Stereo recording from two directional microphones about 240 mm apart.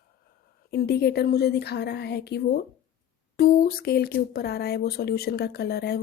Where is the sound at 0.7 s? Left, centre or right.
Left.